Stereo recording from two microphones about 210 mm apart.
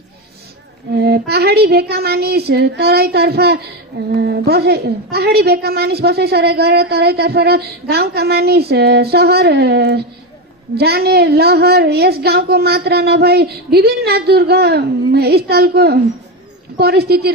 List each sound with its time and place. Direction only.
0.9 s a woman's voice: 50° right (ahead or behind)